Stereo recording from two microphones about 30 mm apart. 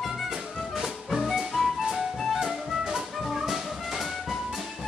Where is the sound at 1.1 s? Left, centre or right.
Centre.